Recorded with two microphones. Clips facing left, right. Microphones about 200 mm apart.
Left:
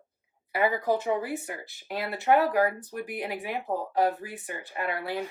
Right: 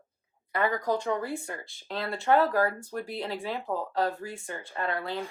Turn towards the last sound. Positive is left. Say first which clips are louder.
# left 1 dB
turn(degrees=15)  # may be behind; listen again after turning